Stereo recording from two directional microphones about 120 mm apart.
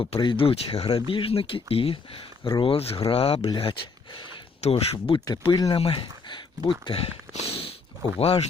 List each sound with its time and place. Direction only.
0.0 s speech: 45° left (ahead or behind)
3.6 s speech: 45° left (ahead or behind)
5.4 s speech: 35° left (ahead or behind)
5.7 s speech: 45° left (ahead or behind)